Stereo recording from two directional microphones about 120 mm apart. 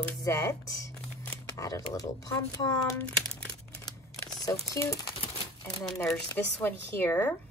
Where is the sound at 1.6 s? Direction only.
30° left (ahead or behind).